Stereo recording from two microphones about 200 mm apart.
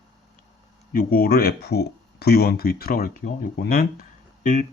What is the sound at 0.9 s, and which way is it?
Speech, 50° left (ahead or behind).